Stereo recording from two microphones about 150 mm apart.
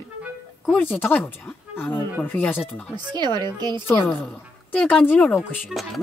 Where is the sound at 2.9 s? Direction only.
30° right (ahead or behind).